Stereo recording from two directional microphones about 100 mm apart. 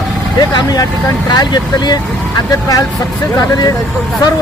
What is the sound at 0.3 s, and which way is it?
Speech, 40° left (ahead or behind).